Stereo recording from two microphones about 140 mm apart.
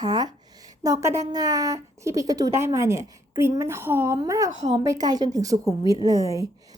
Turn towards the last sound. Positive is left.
turn(degrees=-25)  # may be behind; listen again after turning